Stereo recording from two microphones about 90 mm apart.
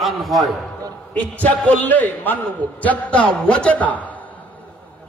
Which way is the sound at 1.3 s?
20° left (ahead or behind).